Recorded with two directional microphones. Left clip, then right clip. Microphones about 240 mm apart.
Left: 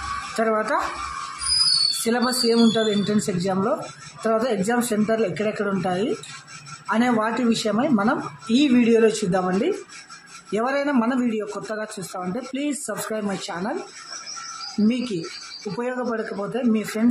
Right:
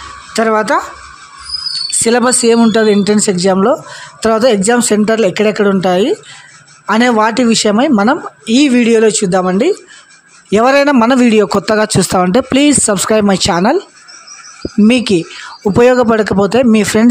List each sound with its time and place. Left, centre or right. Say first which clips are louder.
0.4 s a man's voice: right 11 dB; right
2.0 s a man's voice: right 11 dB; right
15.8 s a man's voice: right 18 dB; right